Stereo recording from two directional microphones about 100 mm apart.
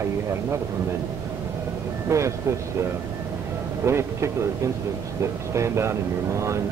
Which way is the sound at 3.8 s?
25° right (ahead or behind).